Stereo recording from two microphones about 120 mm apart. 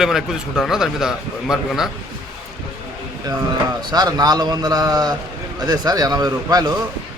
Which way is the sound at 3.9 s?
35° right (ahead or behind).